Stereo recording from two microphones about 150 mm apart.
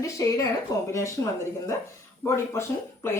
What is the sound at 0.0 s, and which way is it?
Speech, 20° left (ahead or behind).